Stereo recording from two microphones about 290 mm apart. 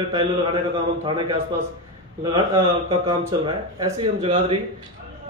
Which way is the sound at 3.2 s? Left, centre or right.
Centre.